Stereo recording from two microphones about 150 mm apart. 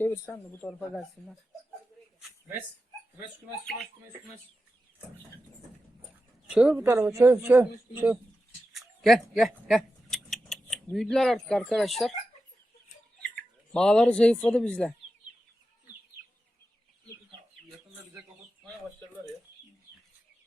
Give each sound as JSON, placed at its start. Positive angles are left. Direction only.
{"t": 0.0, "sound": "speech", "side_deg": 15}
{"t": 0.7, "sound": "speech", "side_deg": 0}
{"t": 6.5, "sound": "speech", "side_deg": -5}
{"t": 8.7, "sound": "a sound", "side_deg": 0}
{"t": 10.9, "sound": "speech", "side_deg": 0}
{"t": 13.7, "sound": "speech", "side_deg": 5}